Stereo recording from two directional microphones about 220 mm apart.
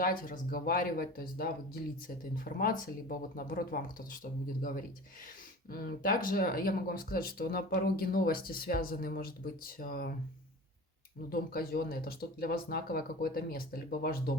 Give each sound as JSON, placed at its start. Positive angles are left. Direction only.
{"t": 0.0, "sound": "speech", "side_deg": 40}
{"t": 11.3, "sound": "speech", "side_deg": 45}